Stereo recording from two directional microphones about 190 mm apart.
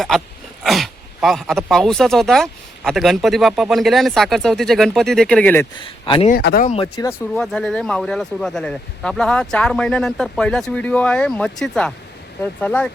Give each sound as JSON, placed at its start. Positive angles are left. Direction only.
{"t": 0.6, "sound": "speech", "side_deg": 0}
{"t": 5.8, "sound": "speech", "side_deg": 30}
{"t": 6.3, "sound": "speech", "side_deg": 55}
{"t": 6.9, "sound": "speech", "side_deg": 20}
{"t": 7.3, "sound": "speech", "side_deg": 0}